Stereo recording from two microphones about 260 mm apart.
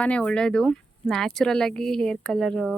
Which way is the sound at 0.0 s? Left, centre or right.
Centre.